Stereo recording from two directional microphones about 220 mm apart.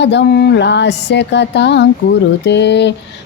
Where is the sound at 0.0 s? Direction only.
50° left (ahead or behind).